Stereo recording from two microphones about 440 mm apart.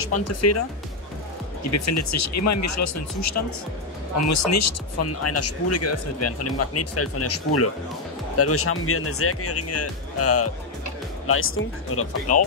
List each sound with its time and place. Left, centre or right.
0.0 s speech: left